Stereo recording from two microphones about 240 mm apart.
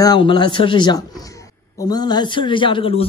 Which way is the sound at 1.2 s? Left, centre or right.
Centre.